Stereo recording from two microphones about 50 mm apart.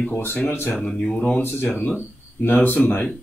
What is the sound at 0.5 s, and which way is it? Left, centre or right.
Speech, left.